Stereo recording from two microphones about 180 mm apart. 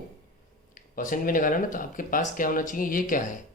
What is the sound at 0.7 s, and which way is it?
Speech, 45° left (ahead or behind).